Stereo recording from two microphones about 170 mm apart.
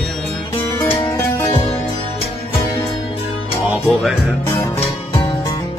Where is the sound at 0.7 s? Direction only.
20° left (ahead or behind).